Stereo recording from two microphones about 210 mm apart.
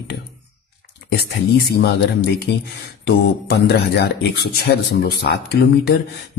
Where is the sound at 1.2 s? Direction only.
50° left (ahead or behind).